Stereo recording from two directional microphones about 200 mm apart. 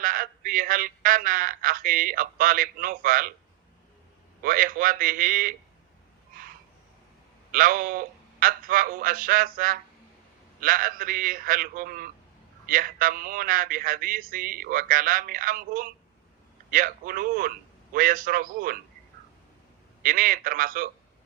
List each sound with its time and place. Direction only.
0.0 s a man's voice: 45° right (ahead or behind)
4.4 s a man's voice: 45° right (ahead or behind)
7.5 s a man's voice: 45° right (ahead or behind)
20.0 s a man's voice: 45° right (ahead or behind)